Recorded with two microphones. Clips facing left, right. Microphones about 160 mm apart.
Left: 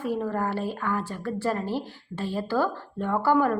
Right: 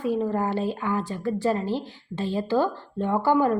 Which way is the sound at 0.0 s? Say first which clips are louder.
Right 3 dB; 20° right (ahead or behind).